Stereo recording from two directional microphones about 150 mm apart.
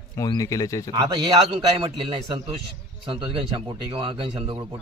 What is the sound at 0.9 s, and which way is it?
A man's voice, 30° right (ahead or behind).